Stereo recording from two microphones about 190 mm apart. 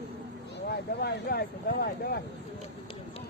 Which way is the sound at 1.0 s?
55° left (ahead or behind).